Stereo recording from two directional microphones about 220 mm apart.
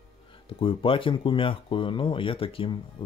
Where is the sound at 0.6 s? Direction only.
25° left (ahead or behind).